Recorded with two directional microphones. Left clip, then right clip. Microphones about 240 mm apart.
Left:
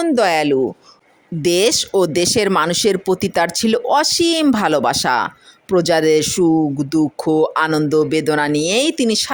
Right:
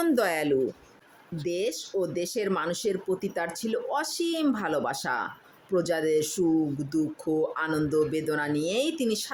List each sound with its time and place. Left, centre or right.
0.0 s speech: left